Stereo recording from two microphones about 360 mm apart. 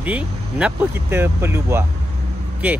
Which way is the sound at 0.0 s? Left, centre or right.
Centre.